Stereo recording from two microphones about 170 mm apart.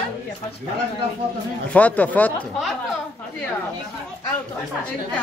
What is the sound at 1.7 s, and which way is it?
Speech, 10° left (ahead or behind).